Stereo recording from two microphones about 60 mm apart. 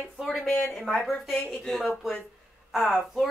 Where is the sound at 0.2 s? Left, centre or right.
Centre.